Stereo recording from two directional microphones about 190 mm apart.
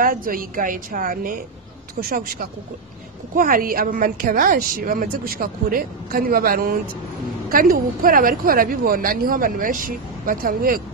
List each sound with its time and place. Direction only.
0.0 s a woman's voice: 45° right (ahead or behind)